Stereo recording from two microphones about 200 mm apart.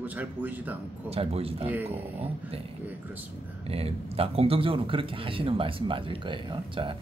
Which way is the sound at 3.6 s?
30° right (ahead or behind).